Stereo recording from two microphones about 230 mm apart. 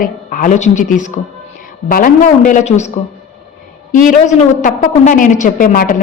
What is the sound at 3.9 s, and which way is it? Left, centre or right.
A woman's voice, left.